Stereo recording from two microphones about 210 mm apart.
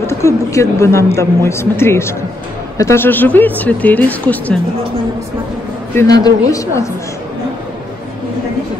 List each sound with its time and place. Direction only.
0.0 s speech: 15° left (ahead or behind)
5.9 s speech: 20° left (ahead or behind)